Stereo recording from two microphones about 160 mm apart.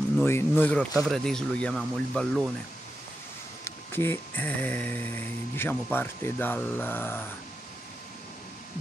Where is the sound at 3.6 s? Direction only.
15° left (ahead or behind).